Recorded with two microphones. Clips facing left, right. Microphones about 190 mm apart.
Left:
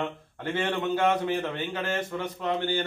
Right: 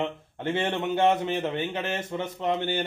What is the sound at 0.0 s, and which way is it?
A man's voice, 25° right (ahead or behind).